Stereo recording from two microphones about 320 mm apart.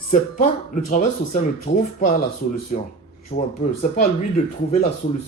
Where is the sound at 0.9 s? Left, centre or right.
Left.